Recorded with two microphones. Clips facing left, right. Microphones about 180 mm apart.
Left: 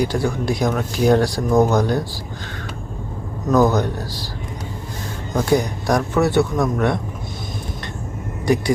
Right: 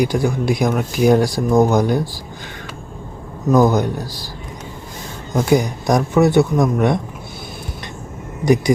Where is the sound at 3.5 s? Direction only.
15° right (ahead or behind).